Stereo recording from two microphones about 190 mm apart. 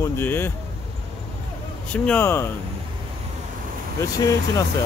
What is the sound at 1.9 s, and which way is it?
Speech, 5° left (ahead or behind).